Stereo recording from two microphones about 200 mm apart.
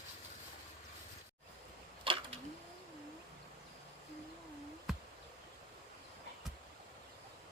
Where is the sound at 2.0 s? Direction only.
25° right (ahead or behind).